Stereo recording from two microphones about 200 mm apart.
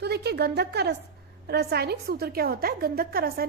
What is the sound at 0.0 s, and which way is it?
A woman's voice, 55° right (ahead or behind).